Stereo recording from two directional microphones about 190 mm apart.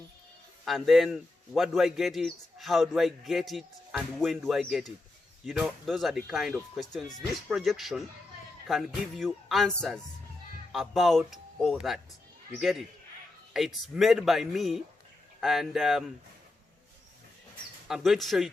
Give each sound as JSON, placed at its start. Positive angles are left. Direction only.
{"t": 0.6, "sound": "a man's voice", "side_deg": 0}
{"t": 9.1, "sound": "a man's voice", "side_deg": 0}
{"t": 17.8, "sound": "a man's voice", "side_deg": 0}